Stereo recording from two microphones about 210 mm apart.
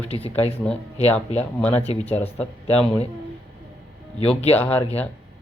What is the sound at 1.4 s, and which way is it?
Speech, 5° left (ahead or behind).